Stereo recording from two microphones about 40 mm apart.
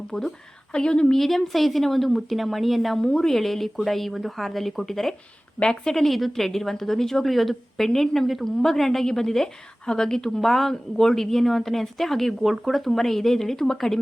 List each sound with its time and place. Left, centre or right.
0.1 s a woman's voice: centre
0.7 s speech: left
1.1 s speech: centre
3.0 s a woman's voice: centre
5.5 s a woman's voice: centre
12.4 s speech: centre